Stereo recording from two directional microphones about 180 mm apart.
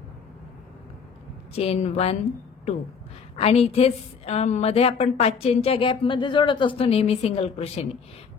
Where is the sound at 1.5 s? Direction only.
35° left (ahead or behind).